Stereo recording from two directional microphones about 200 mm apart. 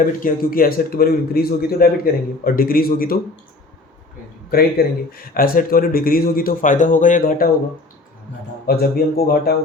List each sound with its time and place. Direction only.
0.0 s a man's voice: 45° left (ahead or behind)
4.5 s a man's voice: 50° left (ahead or behind)
8.6 s a man's voice: 50° left (ahead or behind)